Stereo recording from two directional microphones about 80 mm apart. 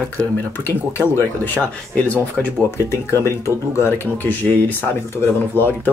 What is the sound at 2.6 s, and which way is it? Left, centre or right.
Speech, left.